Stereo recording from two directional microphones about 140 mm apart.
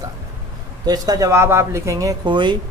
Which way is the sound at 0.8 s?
30° right (ahead or behind).